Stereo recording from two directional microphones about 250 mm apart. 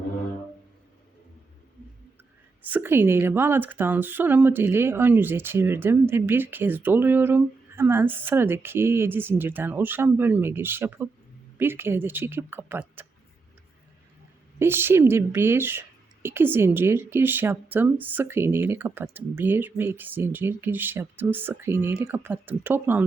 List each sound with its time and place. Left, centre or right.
2.6 s speech: centre
14.6 s speech: centre